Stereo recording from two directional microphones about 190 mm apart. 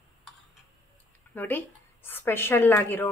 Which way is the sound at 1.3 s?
10° left (ahead or behind).